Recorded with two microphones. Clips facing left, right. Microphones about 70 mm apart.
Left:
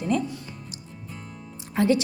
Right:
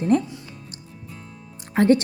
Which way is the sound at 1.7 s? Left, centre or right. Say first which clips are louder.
Right 4 dB; right.